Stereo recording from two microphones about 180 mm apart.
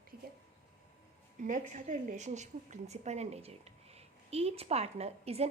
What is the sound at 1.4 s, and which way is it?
A woman's voice, 45° right (ahead or behind).